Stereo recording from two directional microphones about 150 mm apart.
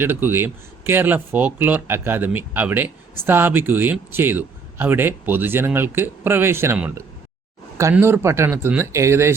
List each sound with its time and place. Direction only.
0.0 s speech: 15° right (ahead or behind)